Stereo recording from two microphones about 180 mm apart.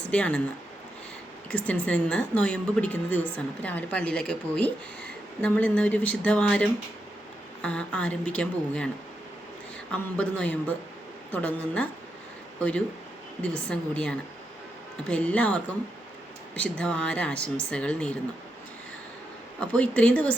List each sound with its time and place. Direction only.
0.1 s a woman's voice: 5° left (ahead or behind)
1.5 s a woman's voice: 5° left (ahead or behind)
9.9 s a woman's voice: 5° left (ahead or behind)
13.4 s a woman's voice: 5° left (ahead or behind)
19.5 s a woman's voice: 5° left (ahead or behind)